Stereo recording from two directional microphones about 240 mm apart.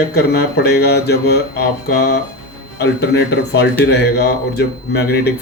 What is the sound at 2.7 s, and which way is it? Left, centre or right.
Speech, left.